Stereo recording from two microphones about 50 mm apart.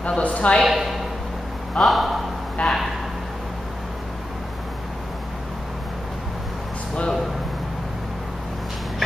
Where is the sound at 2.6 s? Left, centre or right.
Left.